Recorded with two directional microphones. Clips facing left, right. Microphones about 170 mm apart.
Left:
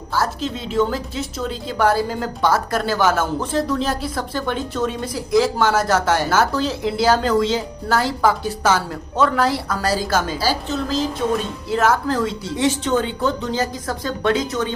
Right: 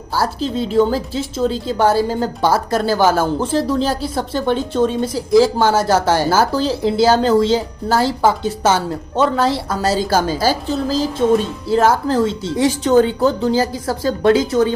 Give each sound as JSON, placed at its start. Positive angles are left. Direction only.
{"t": 0.1, "sound": "speech", "side_deg": -30}